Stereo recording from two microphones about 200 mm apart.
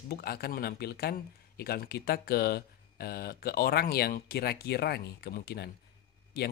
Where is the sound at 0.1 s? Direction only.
50° left (ahead or behind).